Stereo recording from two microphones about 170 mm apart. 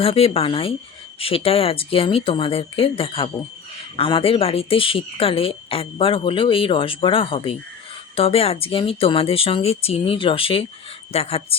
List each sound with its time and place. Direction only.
0.0 s speech: 35° left (ahead or behind)